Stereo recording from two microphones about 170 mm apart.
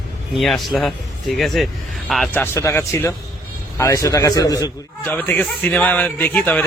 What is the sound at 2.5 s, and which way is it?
A man's voice, 15° left (ahead or behind).